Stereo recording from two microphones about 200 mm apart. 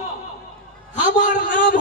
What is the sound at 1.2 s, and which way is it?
Speech, 40° left (ahead or behind).